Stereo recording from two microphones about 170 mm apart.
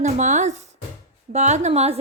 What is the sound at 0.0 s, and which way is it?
A woman's voice, 45° right (ahead or behind).